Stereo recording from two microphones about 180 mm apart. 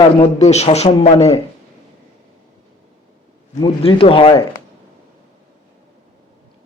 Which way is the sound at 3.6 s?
30° left (ahead or behind).